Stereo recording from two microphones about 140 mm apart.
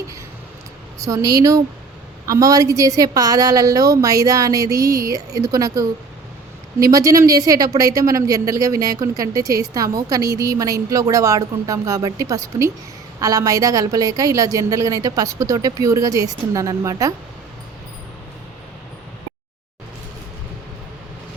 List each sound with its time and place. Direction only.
0.9 s a woman's voice: 25° right (ahead or behind)